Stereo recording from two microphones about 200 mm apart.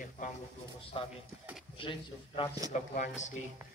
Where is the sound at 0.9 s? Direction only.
25° left (ahead or behind).